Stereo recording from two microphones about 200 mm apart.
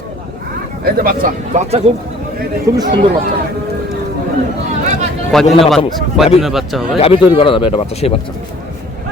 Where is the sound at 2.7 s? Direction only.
15° right (ahead or behind).